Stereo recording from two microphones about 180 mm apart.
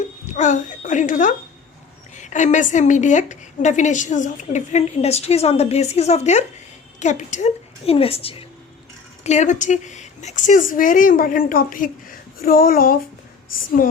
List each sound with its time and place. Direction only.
0.3 s a woman's voice: 45° left (ahead or behind)